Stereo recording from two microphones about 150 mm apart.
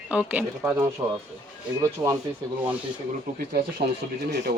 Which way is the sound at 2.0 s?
15° right (ahead or behind).